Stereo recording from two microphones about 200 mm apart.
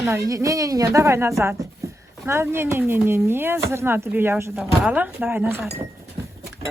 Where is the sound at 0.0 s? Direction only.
15° right (ahead or behind).